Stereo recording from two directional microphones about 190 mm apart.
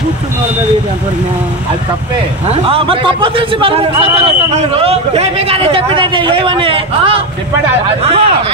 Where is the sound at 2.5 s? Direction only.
30° right (ahead or behind).